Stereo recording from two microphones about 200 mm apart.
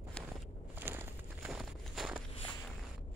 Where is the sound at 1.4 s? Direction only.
5° right (ahead or behind).